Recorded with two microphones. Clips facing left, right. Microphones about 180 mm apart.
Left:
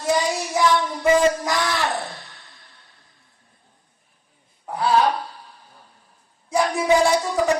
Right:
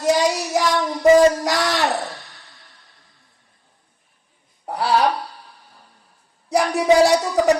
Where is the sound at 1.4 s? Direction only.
40° right (ahead or behind).